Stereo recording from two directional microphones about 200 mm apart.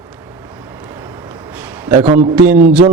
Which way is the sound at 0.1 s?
15° right (ahead or behind).